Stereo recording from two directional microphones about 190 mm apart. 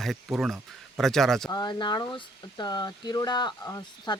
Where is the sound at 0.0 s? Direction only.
Centre (ahead or behind).